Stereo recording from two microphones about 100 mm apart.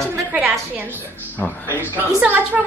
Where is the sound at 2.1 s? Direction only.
15° right (ahead or behind).